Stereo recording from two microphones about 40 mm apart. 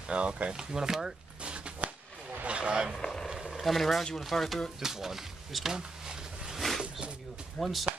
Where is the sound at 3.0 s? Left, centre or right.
Centre.